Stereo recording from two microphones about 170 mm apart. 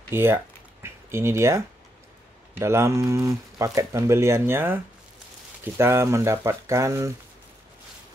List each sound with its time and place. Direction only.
0.1 s speech: 15° right (ahead or behind)
2.6 s speech: 15° right (ahead or behind)